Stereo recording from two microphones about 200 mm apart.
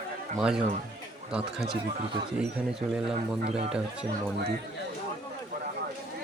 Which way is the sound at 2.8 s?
40° right (ahead or behind).